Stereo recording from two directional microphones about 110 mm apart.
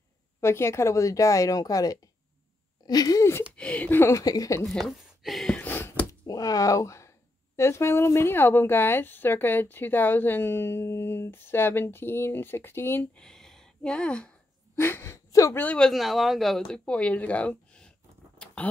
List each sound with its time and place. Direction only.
0.4 s speech: 25° left (ahead or behind)
3.5 s speech: 10° left (ahead or behind)
4.2 s speech: 35° left (ahead or behind)
4.6 s a sound: centre (ahead or behind)
5.6 s a sound: 20° left (ahead or behind)
6.2 s speech: 35° left (ahead or behind); by 14.3 s 10° left (ahead or behind)
14.8 s speech: 20° left (ahead or behind)
15.6 s speech: 10° left (ahead or behind)
18.4 s a sound: 10° left (ahead or behind)